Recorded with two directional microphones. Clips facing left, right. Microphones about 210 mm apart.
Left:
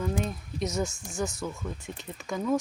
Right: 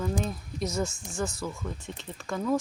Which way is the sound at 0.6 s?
20° left (ahead or behind).